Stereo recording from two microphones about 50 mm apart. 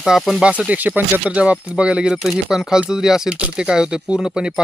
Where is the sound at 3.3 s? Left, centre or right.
Right.